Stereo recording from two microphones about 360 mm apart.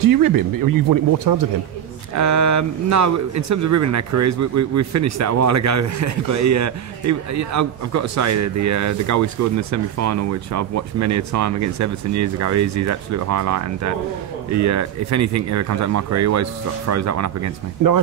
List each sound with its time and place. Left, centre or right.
0.1 s speech: right
2.1 s speech: right